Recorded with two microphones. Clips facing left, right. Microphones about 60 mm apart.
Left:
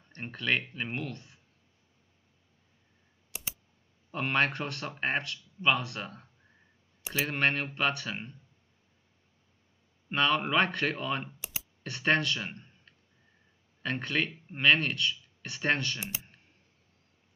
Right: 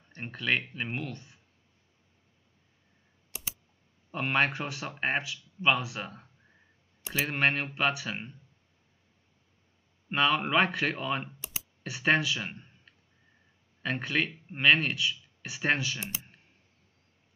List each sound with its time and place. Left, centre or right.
0.0 s speech: centre
4.1 s speech: centre
10.0 s speech: centre